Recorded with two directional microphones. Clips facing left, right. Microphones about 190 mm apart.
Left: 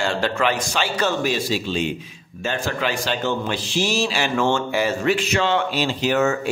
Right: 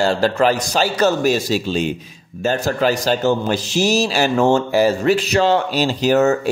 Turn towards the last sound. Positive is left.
turn(degrees=-40)  # may be behind; listen again after turning